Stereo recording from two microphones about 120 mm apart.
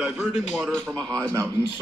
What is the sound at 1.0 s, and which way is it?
Speech, 10° left (ahead or behind).